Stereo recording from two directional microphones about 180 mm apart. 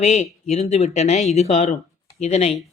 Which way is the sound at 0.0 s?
40° left (ahead or behind).